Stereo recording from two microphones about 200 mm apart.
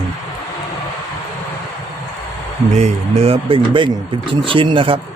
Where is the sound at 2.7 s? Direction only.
35° right (ahead or behind).